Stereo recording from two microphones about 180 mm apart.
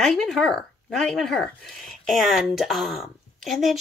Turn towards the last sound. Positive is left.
turn(degrees=0)  # may be behind; listen again after turning